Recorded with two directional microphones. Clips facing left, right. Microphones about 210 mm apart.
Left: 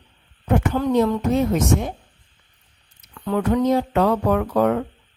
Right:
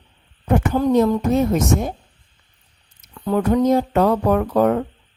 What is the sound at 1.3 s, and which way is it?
Speech, 40° right (ahead or behind).